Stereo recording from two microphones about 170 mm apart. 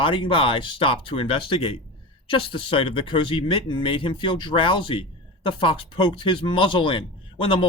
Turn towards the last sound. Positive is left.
turn(degrees=30)  # may be behind; listen again after turning